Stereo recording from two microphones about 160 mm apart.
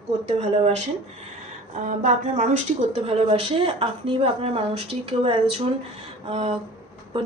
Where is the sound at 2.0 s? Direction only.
50° right (ahead or behind).